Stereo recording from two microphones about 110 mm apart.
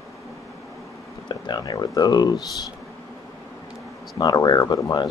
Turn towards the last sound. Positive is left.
turn(degrees=40)  # may be behind; listen again after turning